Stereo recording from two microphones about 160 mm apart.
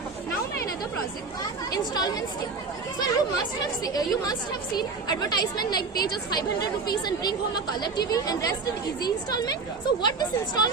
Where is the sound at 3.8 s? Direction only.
25° left (ahead or behind).